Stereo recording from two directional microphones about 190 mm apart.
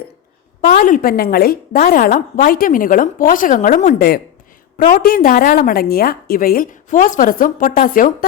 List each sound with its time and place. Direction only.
0.8 s a woman's voice: 45° left (ahead or behind)